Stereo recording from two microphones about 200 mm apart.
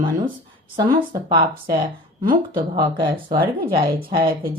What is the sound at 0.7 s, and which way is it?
Speech, 20° right (ahead or behind).